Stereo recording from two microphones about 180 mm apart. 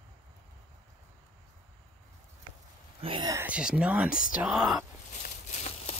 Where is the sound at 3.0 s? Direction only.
25° right (ahead or behind).